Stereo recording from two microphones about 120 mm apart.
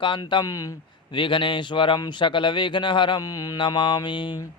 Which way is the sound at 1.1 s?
45° left (ahead or behind).